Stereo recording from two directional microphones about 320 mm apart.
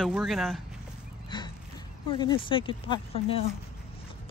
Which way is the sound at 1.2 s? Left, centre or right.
Centre.